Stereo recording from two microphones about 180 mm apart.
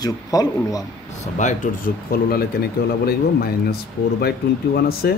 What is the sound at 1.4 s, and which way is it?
Speech, 45° left (ahead or behind).